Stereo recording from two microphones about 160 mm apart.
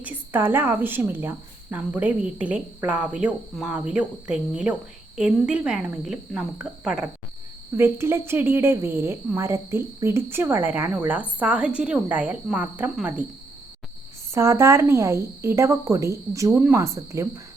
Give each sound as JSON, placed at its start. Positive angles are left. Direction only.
{"t": 0.0, "sound": "a woman's voice", "side_deg": -10}
{"t": 7.8, "sound": "a woman's voice", "side_deg": -15}
{"t": 14.3, "sound": "a woman's voice", "side_deg": -15}